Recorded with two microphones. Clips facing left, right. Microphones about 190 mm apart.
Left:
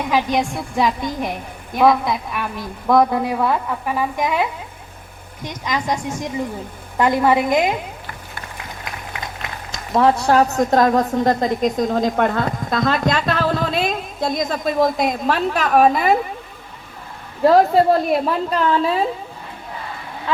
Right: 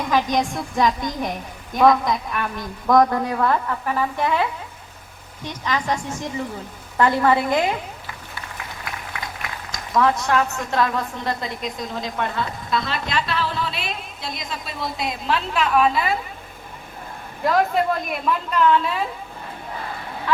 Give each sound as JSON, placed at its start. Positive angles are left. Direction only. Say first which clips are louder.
{"t": 0.1, "sound": "a woman's voice", "louder": "left 1 dB", "side_deg": 10}
{"t": 9.7, "sound": "a woman's voice", "louder": "left 4 dB", "side_deg": 30}
{"t": 17.4, "sound": "a woman's voice", "louder": "left 7 dB", "side_deg": 35}
{"t": 20.3, "sound": "a sound", "louder": "even", "side_deg": 25}